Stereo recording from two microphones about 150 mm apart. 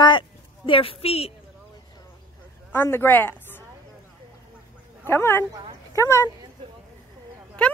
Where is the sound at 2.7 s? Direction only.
15° left (ahead or behind).